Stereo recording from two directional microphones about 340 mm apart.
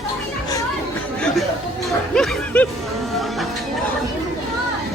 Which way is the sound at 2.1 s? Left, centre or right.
Centre.